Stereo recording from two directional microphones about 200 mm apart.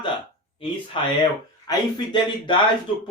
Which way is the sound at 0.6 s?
25° left (ahead or behind).